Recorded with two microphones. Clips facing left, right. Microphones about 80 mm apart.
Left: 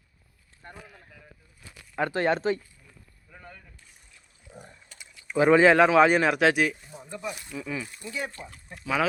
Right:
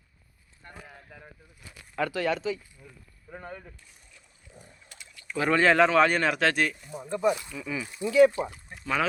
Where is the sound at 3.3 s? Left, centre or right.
Right.